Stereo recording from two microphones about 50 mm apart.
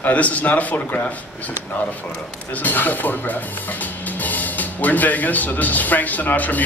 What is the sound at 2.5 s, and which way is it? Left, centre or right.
Music, left.